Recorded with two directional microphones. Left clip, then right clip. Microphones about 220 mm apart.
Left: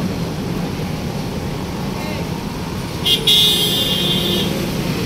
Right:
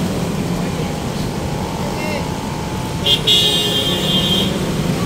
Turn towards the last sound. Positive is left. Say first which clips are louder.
# even
turn(degrees=50)  # may be behind; listen again after turning